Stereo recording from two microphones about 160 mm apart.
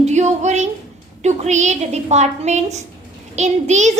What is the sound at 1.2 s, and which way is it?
A child's voice, 45° right (ahead or behind).